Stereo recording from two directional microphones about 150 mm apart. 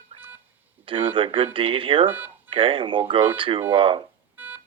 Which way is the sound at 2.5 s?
35° right (ahead or behind).